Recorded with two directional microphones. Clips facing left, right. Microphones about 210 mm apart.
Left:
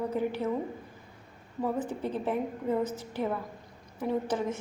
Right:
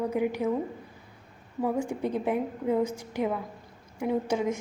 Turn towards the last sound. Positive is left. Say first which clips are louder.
# right 3 dB
turn(degrees=-10)  # may be behind; listen again after turning